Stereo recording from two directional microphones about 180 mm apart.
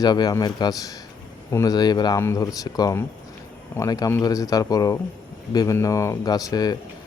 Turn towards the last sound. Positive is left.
turn(degrees=20)  # may be behind; listen again after turning